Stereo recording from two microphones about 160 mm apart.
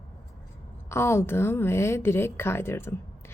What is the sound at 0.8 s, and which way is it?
A woman's voice, 15° left (ahead or behind).